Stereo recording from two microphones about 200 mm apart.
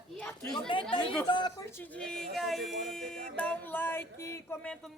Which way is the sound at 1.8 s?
5° left (ahead or behind).